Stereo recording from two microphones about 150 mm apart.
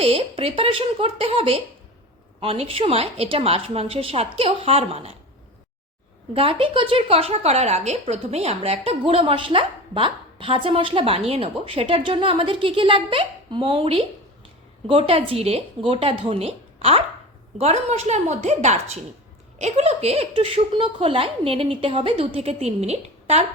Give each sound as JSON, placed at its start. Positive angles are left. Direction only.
{"t": 0.0, "sound": "a woman's voice", "side_deg": -40}
{"t": 6.3, "sound": "a woman's voice", "side_deg": -40}